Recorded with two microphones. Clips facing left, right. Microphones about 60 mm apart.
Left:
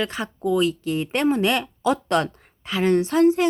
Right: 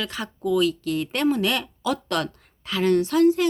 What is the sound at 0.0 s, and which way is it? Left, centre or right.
Speech, left.